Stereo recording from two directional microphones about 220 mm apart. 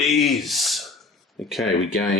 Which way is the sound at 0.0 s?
Centre (ahead or behind).